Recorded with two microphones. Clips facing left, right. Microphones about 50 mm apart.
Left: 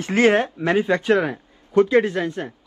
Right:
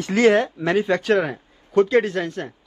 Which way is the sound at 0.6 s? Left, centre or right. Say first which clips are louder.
Left 2 dB; centre.